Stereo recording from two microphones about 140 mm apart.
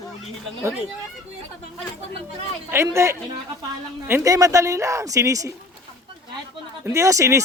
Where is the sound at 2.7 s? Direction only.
20° right (ahead or behind).